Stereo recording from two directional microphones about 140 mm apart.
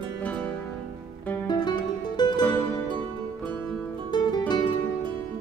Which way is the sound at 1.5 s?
30° left (ahead or behind).